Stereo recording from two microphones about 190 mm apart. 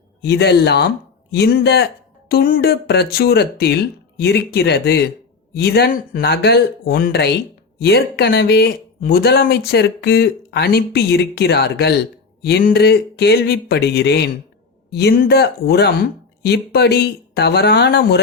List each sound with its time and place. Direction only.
0.2 s speech: 60° left (ahead or behind)